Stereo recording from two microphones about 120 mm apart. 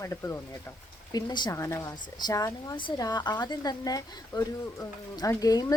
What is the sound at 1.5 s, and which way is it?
Speech, 25° left (ahead or behind).